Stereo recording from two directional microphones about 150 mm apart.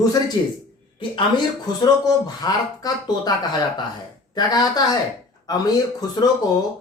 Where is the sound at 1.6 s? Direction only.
25° left (ahead or behind).